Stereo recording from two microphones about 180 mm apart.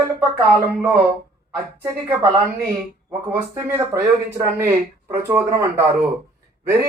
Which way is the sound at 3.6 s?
15° right (ahead or behind).